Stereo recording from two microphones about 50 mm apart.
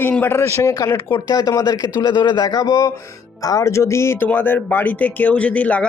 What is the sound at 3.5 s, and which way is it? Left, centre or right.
Speech, left.